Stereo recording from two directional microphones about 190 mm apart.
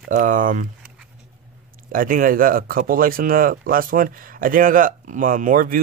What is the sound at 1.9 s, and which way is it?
Speech, 45° right (ahead or behind).